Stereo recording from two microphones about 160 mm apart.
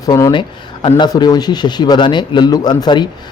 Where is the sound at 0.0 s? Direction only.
25° left (ahead or behind).